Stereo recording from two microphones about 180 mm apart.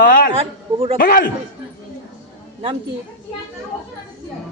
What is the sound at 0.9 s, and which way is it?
Speech, 50° left (ahead or behind).